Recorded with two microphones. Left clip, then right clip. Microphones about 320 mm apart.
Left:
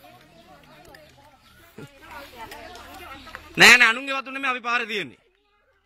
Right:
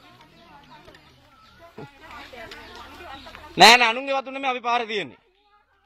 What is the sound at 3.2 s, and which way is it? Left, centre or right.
A man's voice, centre.